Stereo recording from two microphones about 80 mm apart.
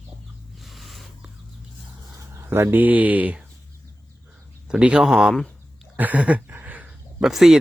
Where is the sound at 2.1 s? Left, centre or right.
Right.